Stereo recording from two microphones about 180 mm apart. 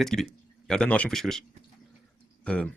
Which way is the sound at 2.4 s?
5° left (ahead or behind).